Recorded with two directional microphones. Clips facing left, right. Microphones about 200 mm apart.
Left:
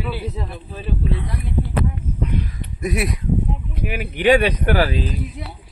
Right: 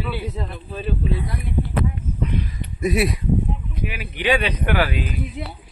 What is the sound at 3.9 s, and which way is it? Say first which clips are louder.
Speech: left 6 dB; 45° left (ahead or behind).